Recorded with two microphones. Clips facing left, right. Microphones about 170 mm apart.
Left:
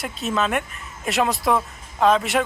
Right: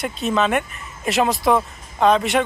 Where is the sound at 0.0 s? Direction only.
Centre (ahead or behind).